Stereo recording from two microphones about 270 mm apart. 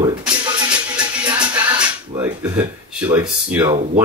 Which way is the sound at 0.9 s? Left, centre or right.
Centre.